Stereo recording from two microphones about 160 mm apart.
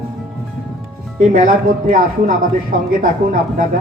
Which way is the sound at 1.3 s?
60° right (ahead or behind).